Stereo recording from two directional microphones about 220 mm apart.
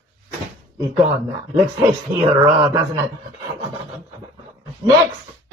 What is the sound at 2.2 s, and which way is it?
Speech, 20° right (ahead or behind).